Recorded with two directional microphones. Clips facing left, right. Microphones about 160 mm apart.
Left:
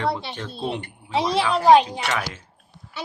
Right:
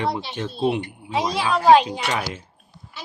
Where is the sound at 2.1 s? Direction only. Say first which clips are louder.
Right 1 dB; 30° right (ahead or behind).